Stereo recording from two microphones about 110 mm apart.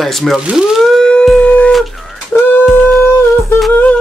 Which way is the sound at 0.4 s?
10° right (ahead or behind).